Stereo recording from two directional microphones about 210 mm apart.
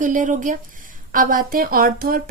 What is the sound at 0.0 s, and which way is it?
A woman's voice, 40° right (ahead or behind).